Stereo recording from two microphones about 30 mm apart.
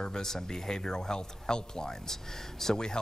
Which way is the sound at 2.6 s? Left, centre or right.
Centre.